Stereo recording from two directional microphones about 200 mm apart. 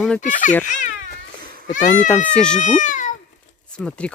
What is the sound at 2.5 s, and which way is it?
Speech, 40° left (ahead or behind).